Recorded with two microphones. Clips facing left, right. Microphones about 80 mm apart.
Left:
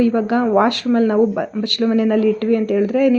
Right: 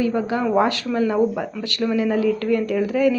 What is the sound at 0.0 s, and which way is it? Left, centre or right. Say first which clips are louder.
Speech: left 5 dB; left.